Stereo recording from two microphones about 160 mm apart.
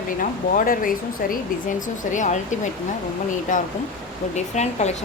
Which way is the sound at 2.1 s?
50° left (ahead or behind).